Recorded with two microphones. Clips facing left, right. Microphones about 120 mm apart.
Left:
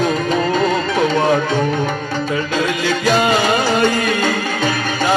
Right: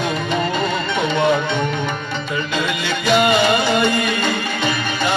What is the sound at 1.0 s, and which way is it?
Music, 35° left (ahead or behind).